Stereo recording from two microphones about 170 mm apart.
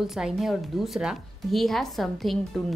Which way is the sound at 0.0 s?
Centre (ahead or behind).